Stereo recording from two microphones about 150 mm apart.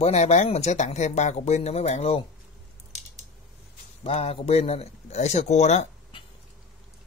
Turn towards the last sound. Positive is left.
turn(degrees=50)  # may be behind; listen again after turning